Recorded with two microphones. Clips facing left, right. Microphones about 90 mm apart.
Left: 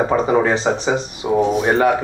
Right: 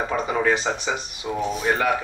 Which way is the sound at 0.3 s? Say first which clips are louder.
Left 6 dB; 35° left (ahead or behind).